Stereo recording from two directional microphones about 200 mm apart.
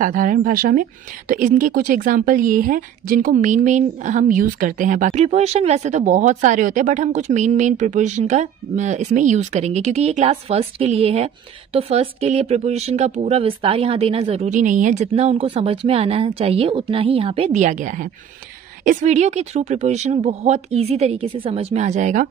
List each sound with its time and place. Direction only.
0.0 s a woman's voice: 40° right (ahead or behind)